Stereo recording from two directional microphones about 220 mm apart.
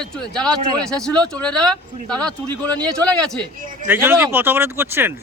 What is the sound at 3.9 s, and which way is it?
Speech, 10° right (ahead or behind).